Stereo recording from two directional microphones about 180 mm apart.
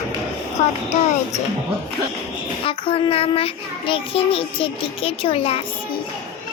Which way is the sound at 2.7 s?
30° left (ahead or behind).